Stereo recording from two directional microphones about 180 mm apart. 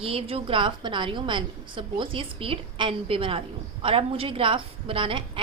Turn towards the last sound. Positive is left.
turn(degrees=-30)  # may be behind; listen again after turning